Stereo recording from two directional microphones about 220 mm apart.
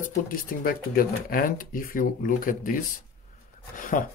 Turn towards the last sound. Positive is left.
turn(degrees=35)  # may be behind; listen again after turning